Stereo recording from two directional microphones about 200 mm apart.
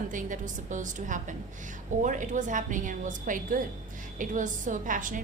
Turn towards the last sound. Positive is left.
turn(degrees=-40)  # may be behind; listen again after turning